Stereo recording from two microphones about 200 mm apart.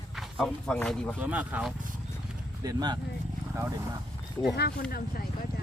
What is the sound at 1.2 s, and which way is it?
Speech, 5° right (ahead or behind).